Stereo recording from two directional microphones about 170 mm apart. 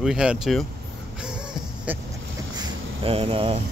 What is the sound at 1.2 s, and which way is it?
Music, 5° right (ahead or behind).